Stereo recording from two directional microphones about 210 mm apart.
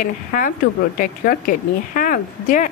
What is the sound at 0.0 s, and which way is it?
A woman's voice, 40° left (ahead or behind).